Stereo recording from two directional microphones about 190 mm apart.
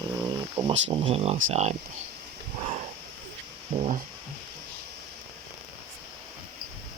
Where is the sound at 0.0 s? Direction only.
20° right (ahead or behind).